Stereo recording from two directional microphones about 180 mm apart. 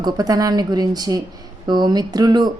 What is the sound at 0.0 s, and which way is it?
A woman's voice, 20° right (ahead or behind).